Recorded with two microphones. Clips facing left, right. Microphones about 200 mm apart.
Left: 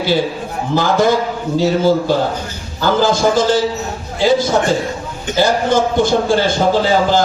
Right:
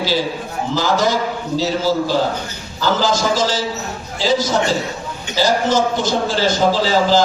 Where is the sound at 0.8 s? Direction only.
55° left (ahead or behind).